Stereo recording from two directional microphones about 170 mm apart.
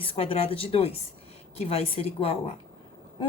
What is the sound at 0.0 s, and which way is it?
A woman's voice, 35° left (ahead or behind).